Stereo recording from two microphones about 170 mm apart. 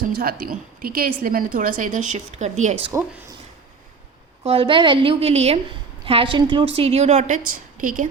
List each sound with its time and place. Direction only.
0.0 s a woman's voice: 55° right (ahead or behind)
4.4 s a woman's voice: 30° right (ahead or behind); by 8.0 s 55° right (ahead or behind)